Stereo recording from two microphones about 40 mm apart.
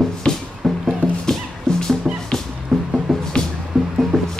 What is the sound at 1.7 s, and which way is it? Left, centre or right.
Music, centre.